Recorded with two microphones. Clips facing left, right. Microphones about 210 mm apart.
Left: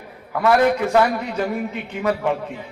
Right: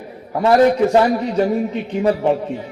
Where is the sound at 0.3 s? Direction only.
35° right (ahead or behind).